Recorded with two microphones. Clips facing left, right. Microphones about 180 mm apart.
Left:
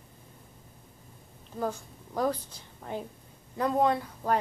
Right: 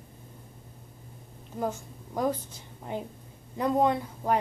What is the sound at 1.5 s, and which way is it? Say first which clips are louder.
Speech: right 1 dB; 15° right (ahead or behind).